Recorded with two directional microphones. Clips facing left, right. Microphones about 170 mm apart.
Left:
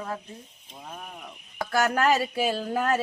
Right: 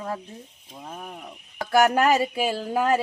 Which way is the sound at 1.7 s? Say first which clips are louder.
Right 4 dB; 15° right (ahead or behind).